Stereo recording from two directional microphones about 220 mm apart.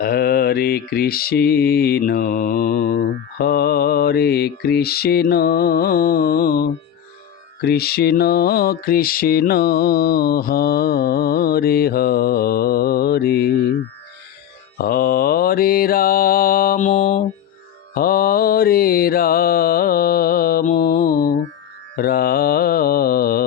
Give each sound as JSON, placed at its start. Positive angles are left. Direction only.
{"t": 0.0, "sound": "mantra", "side_deg": 45}
{"t": 14.8, "sound": "mantra", "side_deg": 45}